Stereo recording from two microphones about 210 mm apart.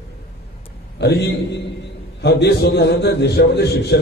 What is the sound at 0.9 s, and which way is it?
A man's voice, 50° left (ahead or behind).